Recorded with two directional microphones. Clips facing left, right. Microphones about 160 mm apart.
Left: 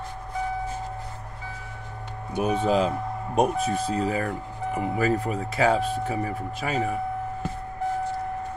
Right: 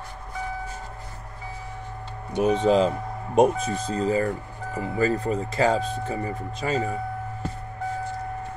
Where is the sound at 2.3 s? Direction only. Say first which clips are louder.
Right 3 dB; 5° left (ahead or behind).